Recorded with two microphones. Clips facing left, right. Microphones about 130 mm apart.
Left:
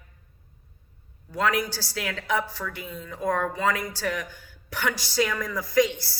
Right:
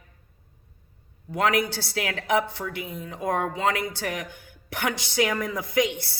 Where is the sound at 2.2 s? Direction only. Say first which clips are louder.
Right 4 dB; 20° right (ahead or behind).